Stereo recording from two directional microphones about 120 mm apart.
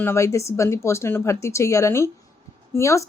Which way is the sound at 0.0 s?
25° left (ahead or behind).